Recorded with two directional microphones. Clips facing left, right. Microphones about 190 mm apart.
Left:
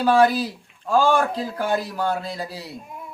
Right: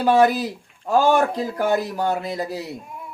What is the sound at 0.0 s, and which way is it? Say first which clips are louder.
Speech: right 1 dB; 20° right (ahead or behind).